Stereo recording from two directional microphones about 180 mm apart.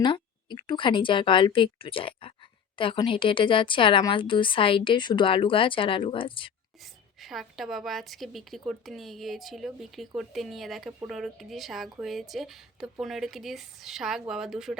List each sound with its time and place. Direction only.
0.0 s a woman's voice: 25° left (ahead or behind)
6.8 s speech: centre (ahead or behind)